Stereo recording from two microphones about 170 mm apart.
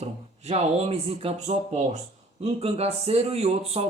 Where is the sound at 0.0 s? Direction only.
35° right (ahead or behind).